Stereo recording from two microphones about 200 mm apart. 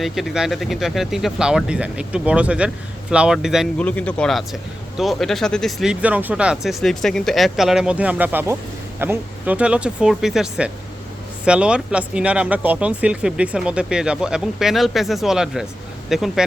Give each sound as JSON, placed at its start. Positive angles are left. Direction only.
{"t": 0.0, "sound": "speech", "side_deg": 0}